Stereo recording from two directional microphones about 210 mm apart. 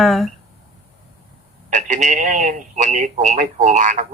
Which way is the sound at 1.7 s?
35° right (ahead or behind).